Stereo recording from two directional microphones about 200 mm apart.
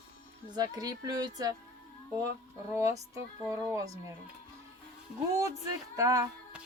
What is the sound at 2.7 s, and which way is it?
Speech, 15° right (ahead or behind).